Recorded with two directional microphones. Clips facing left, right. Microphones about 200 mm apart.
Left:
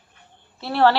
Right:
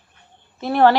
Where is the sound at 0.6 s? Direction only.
15° right (ahead or behind).